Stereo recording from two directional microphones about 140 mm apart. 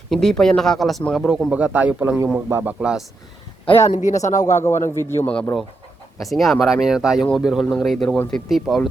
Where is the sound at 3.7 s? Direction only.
50° left (ahead or behind).